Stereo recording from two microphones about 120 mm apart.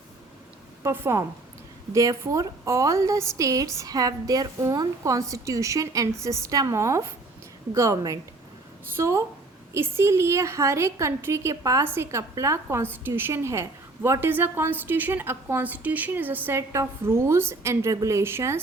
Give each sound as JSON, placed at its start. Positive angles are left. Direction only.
{"t": 0.8, "sound": "a woman's voice", "side_deg": -20}